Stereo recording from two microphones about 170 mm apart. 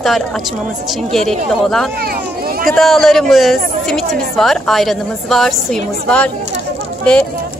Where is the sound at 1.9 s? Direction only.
60° right (ahead or behind).